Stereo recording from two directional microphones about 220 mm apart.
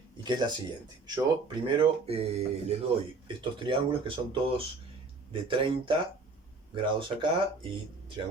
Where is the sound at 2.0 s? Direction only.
25° right (ahead or behind).